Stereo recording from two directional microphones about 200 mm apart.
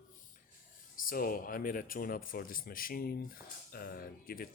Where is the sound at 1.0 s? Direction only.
45° left (ahead or behind).